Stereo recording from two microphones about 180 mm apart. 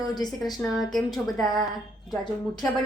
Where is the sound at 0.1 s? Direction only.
20° left (ahead or behind).